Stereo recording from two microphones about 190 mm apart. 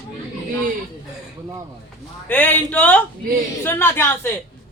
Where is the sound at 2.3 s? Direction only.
10° left (ahead or behind).